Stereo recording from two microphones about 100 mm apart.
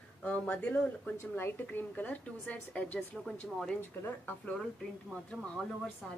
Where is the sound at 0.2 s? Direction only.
10° left (ahead or behind).